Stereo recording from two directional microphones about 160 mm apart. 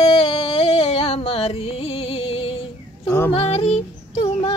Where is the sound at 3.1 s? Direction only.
15° left (ahead or behind).